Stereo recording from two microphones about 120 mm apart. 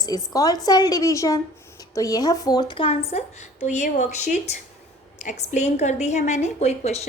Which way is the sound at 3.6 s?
85° left.